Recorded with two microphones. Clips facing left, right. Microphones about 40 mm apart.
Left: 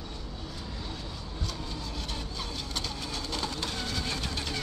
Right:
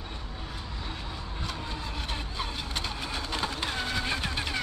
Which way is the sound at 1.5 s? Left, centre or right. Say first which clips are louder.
Right 3 dB; right.